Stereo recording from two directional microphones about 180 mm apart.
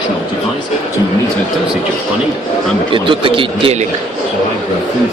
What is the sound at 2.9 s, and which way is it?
Speech, 30° right (ahead or behind).